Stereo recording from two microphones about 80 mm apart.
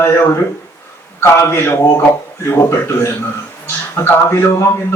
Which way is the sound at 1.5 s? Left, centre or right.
Left.